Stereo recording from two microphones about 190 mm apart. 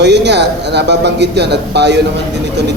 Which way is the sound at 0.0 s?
65° right (ahead or behind).